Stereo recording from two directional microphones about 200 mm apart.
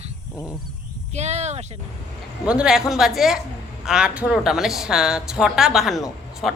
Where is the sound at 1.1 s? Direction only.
35° right (ahead or behind).